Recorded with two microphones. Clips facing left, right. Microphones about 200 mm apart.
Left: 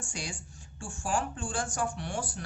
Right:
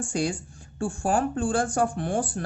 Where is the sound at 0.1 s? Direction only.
55° right (ahead or behind).